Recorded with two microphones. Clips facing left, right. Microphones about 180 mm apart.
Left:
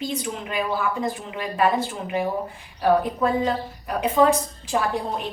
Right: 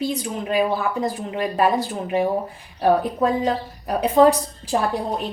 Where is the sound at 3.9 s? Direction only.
35° right (ahead or behind).